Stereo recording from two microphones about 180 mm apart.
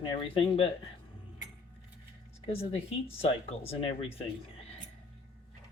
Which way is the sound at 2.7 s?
35° left (ahead or behind).